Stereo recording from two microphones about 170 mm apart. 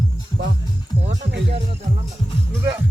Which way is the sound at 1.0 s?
90° right.